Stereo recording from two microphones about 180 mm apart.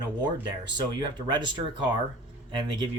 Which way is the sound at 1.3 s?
25° right (ahead or behind).